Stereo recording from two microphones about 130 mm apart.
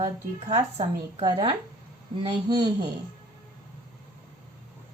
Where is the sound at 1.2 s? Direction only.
35° right (ahead or behind).